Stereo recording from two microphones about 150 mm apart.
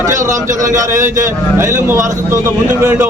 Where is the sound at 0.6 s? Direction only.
20° right (ahead or behind).